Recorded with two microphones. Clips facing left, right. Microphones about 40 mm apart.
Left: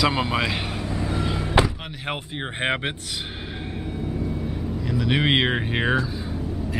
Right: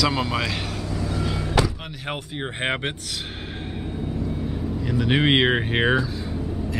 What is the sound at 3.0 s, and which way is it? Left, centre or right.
Gasp, centre.